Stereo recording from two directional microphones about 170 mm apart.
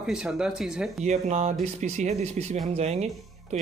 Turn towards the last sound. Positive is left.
turn(degrees=-40)  # may be behind; listen again after turning